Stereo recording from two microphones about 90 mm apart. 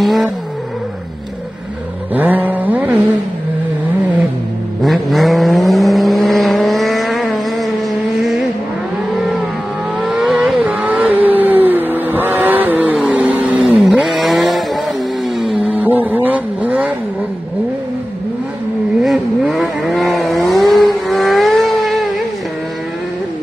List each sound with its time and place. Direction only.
0.0 s cat: centre (ahead or behind)
2.1 s a sound: 20° right (ahead or behind)
4.8 s vehicle: centre (ahead or behind)
9.9 s vehicle: 5° right (ahead or behind)
10.8 s vehicle: 20° right (ahead or behind)
13.7 s vehicle: centre (ahead or behind)
15.6 s vehicle: 20° right (ahead or behind)
19.5 s vehicle: centre (ahead or behind)